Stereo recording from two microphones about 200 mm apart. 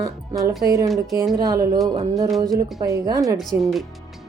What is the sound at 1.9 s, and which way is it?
Music, 25° right (ahead or behind).